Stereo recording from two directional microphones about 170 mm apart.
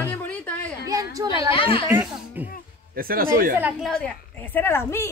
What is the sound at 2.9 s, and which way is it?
Speech, 60° right (ahead or behind).